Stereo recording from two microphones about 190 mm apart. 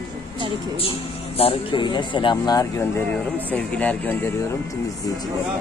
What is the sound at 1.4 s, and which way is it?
Speech, 30° left (ahead or behind).